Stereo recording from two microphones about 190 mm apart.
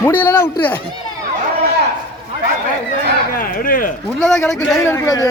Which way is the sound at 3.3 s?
50° left (ahead or behind).